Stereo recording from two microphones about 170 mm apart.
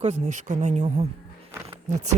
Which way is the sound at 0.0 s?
45° right (ahead or behind).